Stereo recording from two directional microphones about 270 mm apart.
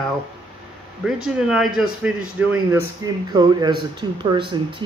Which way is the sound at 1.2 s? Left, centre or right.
Centre.